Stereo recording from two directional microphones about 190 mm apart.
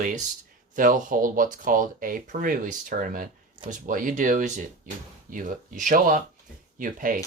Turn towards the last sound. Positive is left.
turn(degrees=-45)  # may be behind; listen again after turning